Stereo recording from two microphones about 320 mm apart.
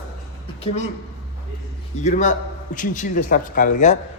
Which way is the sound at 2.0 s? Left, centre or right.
Left.